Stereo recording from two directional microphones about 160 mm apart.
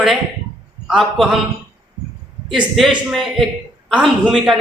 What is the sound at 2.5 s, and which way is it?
A man's voice, centre (ahead or behind).